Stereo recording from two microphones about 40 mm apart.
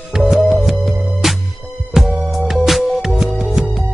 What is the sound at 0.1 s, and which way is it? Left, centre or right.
Music, centre.